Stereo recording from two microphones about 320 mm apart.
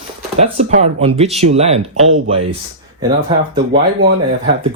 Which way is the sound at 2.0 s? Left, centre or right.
Right.